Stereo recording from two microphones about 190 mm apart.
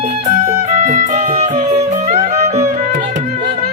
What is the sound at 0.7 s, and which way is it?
Music, 40° right (ahead or behind).